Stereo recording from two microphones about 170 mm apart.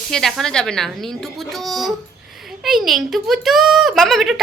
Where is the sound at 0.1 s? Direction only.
Centre (ahead or behind).